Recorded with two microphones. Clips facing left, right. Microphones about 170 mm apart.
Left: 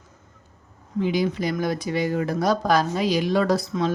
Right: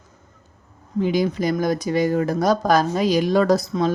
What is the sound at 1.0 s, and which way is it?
Speech, 45° right (ahead or behind).